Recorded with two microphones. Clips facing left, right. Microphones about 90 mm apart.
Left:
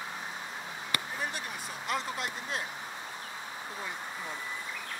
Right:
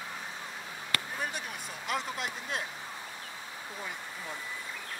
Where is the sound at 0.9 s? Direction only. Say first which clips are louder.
Even; 15° left (ahead or behind).